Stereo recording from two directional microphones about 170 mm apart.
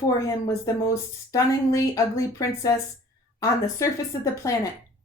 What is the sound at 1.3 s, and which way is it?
Speech, 20° left (ahead or behind).